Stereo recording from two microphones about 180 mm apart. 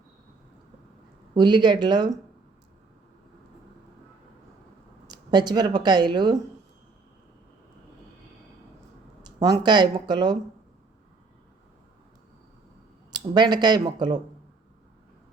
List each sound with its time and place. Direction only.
1.3 s speech: 25° right (ahead or behind)
5.0 s speech: 25° right (ahead or behind)
9.2 s speech: 20° right (ahead or behind)
13.1 s speech: 25° right (ahead or behind)